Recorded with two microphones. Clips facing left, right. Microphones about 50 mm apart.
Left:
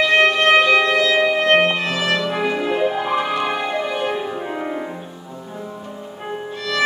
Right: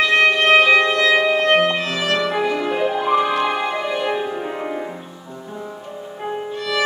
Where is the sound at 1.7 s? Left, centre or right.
Centre.